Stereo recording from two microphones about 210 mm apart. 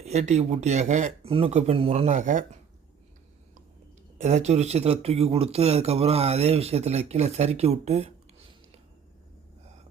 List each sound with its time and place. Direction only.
0.0 s speech: 30° right (ahead or behind)
4.2 s speech: 35° right (ahead or behind)